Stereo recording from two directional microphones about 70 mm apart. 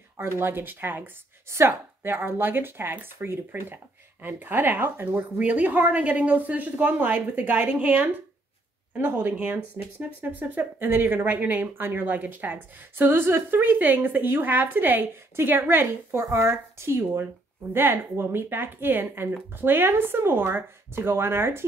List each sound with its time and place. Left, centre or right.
0.2 s speech: right